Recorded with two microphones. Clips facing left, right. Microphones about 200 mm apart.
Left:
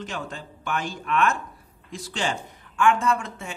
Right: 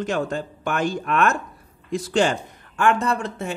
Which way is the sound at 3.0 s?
35° right (ahead or behind).